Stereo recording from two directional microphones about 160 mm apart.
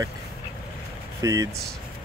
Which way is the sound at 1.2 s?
20° right (ahead or behind).